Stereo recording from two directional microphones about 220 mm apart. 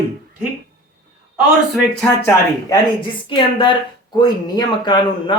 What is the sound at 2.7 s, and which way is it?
Speech, 20° left (ahead or behind).